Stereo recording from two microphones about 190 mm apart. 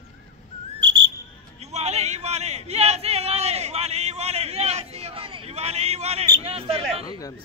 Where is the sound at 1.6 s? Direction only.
35° right (ahead or behind).